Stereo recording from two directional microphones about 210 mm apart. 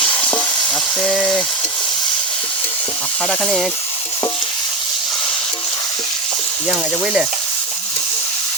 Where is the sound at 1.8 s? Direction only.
20° left (ahead or behind).